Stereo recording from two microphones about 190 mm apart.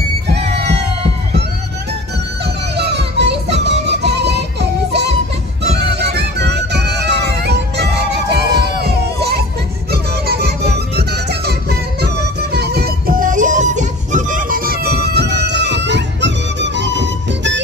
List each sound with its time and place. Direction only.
2.4 s music: 60° right (ahead or behind)